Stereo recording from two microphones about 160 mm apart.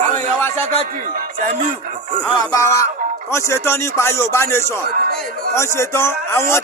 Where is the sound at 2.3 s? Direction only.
20° left (ahead or behind).